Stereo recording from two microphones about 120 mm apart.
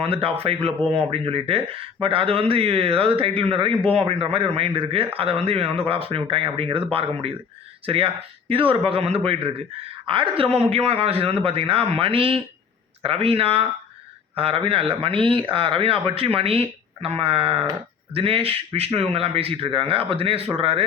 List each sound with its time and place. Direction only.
0.0 s speech: 55° right (ahead or behind)
7.9 s speech: 50° right (ahead or behind)